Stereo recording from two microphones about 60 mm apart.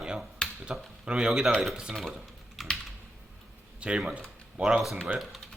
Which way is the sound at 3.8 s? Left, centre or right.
Centre.